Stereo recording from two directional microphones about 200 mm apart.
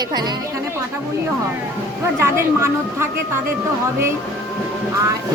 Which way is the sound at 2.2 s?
10° right (ahead or behind).